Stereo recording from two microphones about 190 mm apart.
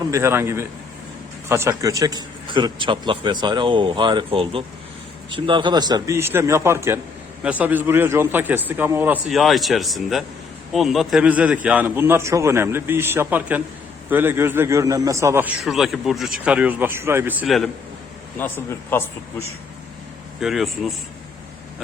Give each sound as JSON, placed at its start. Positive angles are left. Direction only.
{"t": 0.1, "sound": "a man's voice", "side_deg": -15}
{"t": 15.6, "sound": "a man's voice", "side_deg": 0}
{"t": 18.3, "sound": "a man's voice", "side_deg": 10}
{"t": 20.4, "sound": "speech", "side_deg": 0}